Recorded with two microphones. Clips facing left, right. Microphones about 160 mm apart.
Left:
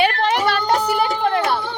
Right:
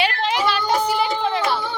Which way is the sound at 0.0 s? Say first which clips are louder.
Left 3 dB; 55° left (ahead or behind).